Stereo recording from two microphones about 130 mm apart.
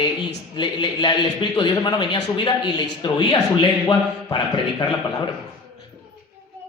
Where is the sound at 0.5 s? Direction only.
35° left (ahead or behind).